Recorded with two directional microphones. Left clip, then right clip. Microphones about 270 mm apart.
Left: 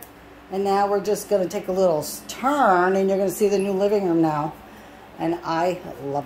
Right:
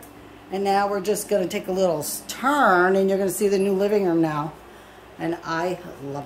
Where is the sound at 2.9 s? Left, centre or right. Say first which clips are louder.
Even; centre.